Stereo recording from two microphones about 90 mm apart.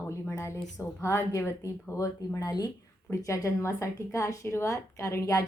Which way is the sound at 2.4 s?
50° left (ahead or behind).